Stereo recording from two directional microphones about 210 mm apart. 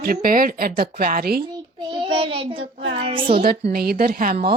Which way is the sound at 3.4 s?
45° right (ahead or behind).